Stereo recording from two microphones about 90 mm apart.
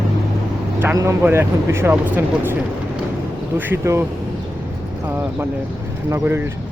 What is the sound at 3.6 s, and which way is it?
Speech, 20° right (ahead or behind).